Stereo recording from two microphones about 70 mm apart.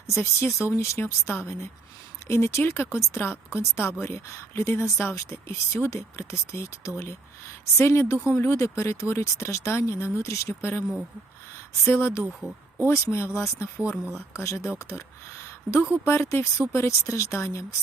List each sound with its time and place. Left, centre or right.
0.1 s speech: left
11.9 s speech: left
12.3 s speech: centre
12.9 s a woman's voice: left